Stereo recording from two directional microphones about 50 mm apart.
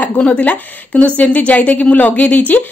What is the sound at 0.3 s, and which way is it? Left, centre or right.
A woman's voice, left.